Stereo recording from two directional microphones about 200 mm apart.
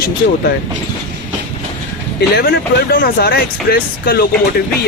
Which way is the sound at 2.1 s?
55° left (ahead or behind).